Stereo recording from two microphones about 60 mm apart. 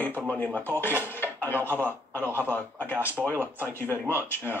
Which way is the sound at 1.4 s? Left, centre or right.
Left.